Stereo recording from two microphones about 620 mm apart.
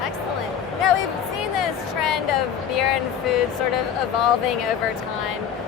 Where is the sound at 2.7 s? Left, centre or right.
Left.